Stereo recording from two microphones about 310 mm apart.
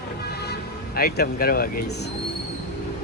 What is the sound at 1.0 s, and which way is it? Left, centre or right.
Speech, left.